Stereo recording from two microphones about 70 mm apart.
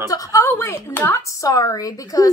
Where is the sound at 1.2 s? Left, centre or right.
Left.